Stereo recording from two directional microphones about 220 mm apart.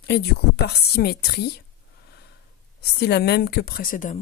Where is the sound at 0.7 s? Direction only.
45° left (ahead or behind).